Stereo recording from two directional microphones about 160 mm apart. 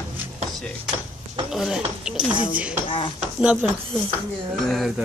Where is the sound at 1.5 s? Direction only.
5° right (ahead or behind).